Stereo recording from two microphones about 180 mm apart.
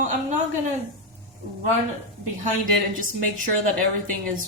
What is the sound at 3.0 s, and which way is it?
Speech, 50° right (ahead or behind).